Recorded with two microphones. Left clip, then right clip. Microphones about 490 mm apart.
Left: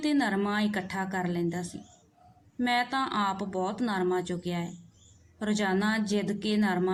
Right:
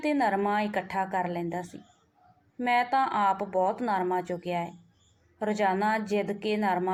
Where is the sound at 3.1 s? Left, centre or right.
Centre.